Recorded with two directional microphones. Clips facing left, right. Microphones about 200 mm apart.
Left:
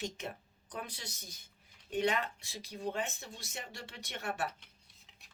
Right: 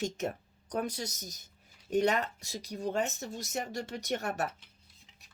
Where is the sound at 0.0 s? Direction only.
45° right (ahead or behind).